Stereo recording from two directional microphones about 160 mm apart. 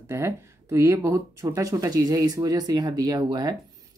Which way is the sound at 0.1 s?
15° right (ahead or behind).